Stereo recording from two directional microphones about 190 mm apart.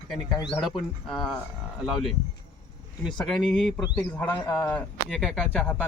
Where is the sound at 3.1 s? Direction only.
Centre (ahead or behind).